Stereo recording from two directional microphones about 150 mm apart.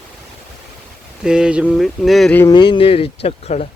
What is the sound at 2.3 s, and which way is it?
Speech, 15° left (ahead or behind).